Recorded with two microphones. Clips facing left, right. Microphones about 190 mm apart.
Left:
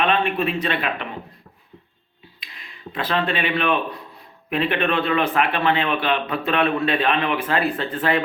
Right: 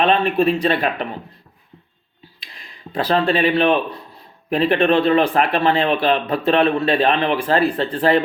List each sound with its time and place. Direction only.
0.0 s speech: 40° right (ahead or behind)
2.4 s speech: 35° right (ahead or behind)